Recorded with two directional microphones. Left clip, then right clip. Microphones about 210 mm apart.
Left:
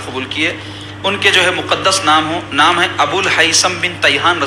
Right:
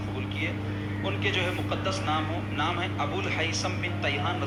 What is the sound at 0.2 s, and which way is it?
A man's voice, 50° left (ahead or behind).